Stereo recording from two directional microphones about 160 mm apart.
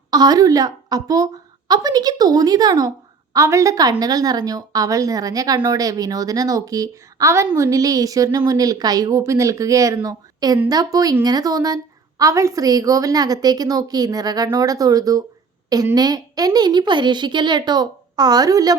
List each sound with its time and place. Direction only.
0.1 s a woman's voice: 25° right (ahead or behind)